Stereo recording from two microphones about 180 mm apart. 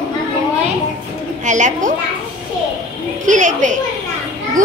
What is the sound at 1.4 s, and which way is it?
Speech, 45° right (ahead or behind).